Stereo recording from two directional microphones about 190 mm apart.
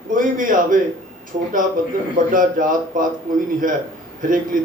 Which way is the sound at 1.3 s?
30° right (ahead or behind).